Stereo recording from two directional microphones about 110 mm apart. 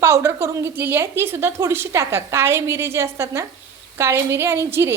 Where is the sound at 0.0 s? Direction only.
25° right (ahead or behind).